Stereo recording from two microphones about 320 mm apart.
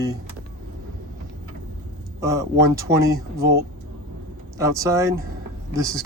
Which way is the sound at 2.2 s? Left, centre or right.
Centre.